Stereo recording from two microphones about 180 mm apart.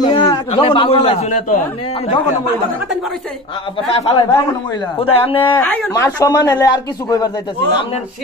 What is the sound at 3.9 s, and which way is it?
A man's voice, 30° left (ahead or behind).